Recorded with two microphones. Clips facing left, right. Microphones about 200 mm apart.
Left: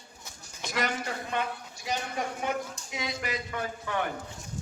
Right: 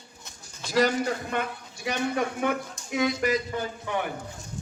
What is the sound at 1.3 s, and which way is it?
Speech, 55° right (ahead or behind).